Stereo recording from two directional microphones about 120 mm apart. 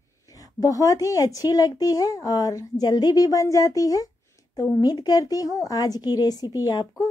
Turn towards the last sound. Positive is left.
turn(degrees=35)  # may be behind; listen again after turning